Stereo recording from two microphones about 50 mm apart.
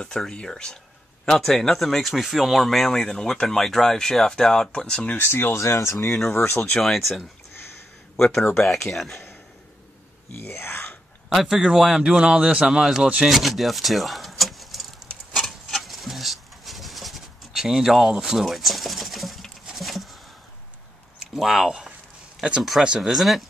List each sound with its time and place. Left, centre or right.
0.2 s speech: centre
5.1 s speech: left
5.6 s speech: left
6.5 s speech: left
6.8 s speech: centre
10.5 s a sound: left
11.2 s speech: centre
12.8 s speech: centre
13.3 s a sound: centre
17.5 s speech: centre
18.4 s a sound: centre
21.2 s speech: centre